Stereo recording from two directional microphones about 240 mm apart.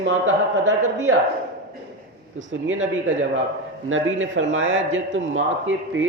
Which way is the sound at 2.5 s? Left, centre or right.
Right.